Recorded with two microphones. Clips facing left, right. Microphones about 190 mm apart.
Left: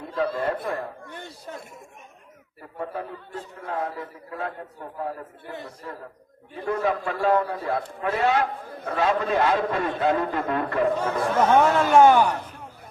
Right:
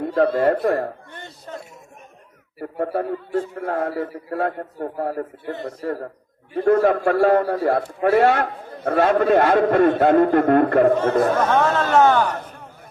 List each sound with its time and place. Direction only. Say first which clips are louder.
0.0 s a man's voice: right 8 dB; 50° right (ahead or behind)
2.7 s a man's voice: right 9 dB; 55° right (ahead or behind)
5.5 s a man's voice: right 9 dB; 60° right (ahead or behind)
11.4 s speech: even; 10° left (ahead or behind)